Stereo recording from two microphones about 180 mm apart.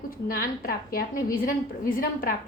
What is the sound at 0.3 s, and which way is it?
A woman's voice, 55° left (ahead or behind).